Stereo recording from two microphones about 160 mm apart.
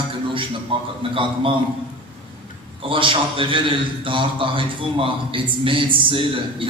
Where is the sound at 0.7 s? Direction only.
35° right (ahead or behind).